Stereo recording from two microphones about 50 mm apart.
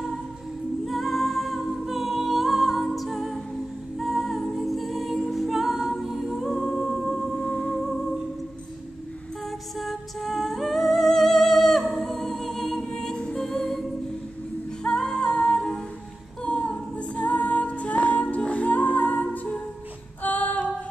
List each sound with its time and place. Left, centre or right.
0.8 s a capella: centre
4.0 s music: centre
9.8 s music: centre
14.8 s music: centre
16.4 s a capella: left
19.3 s music: left
20.2 s music: left